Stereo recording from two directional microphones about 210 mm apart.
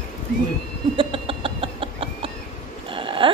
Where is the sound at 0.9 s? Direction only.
25° right (ahead or behind).